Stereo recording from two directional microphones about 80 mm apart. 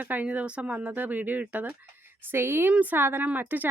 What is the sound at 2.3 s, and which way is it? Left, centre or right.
Speech, right.